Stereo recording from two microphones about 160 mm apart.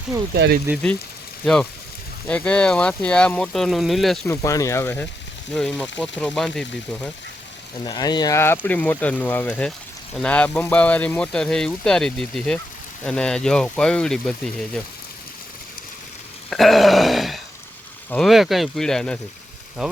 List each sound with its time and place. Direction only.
0.3 s speech: 90° right
2.2 s speech: 5° left (ahead or behind)
4.3 s speech: 20° left (ahead or behind)
5.5 s speech: 5° left (ahead or behind)
7.9 s speech: 25° left (ahead or behind); by 14.8 s 5° left (ahead or behind)
16.5 s a sound: centre (ahead or behind)
18.1 s speech: centre (ahead or behind)